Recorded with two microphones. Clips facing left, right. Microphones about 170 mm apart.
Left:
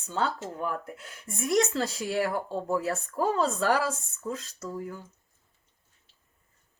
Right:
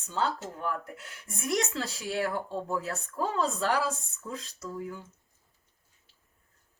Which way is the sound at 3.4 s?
Centre (ahead or behind).